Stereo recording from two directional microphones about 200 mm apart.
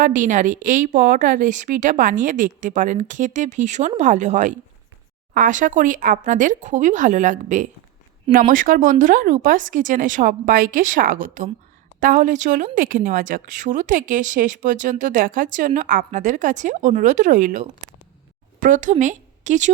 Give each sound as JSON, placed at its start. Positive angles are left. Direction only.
{"t": 0.0, "sound": "a woman's voice", "side_deg": -40}